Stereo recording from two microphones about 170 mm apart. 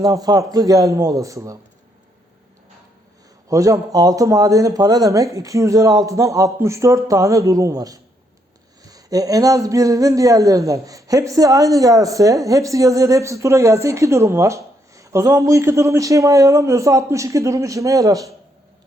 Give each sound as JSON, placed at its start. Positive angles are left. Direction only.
{"t": 0.0, "sound": "speech", "side_deg": -20}
{"t": 3.5, "sound": "speech", "side_deg": -20}